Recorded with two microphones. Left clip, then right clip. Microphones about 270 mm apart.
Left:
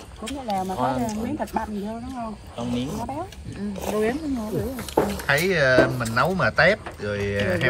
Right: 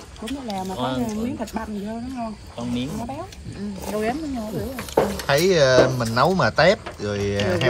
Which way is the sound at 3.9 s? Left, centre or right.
Centre.